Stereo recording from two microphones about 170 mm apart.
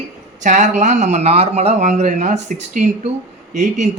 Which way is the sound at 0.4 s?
45° right (ahead or behind).